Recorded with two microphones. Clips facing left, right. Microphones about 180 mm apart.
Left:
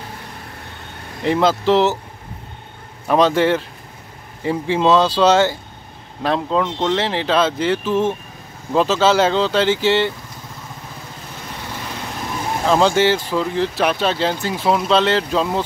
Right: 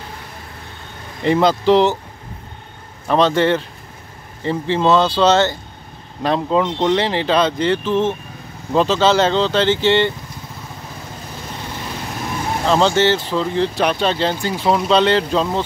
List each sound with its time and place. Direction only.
1.2 s speech: centre (ahead or behind)
3.1 s speech: 10° left (ahead or behind)
6.2 s speech: 5° right (ahead or behind)
12.6 s speech: 10° left (ahead or behind)